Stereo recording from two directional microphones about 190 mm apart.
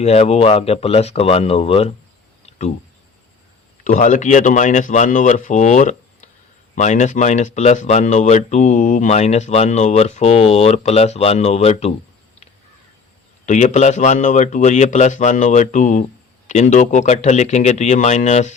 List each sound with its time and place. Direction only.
0.0 s speech: 35° left (ahead or behind)
2.5 s a sound: 35° left (ahead or behind)
3.8 s speech: 40° left (ahead or behind)
13.4 s speech: 40° left (ahead or behind)